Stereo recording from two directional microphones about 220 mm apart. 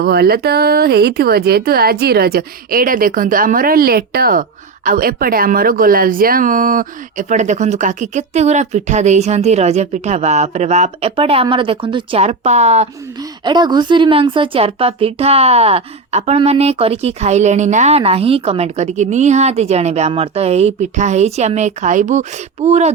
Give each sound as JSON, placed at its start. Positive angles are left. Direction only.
{"t": 0.0, "sound": "speech", "side_deg": -45}
{"t": 13.4, "sound": "speech", "side_deg": -20}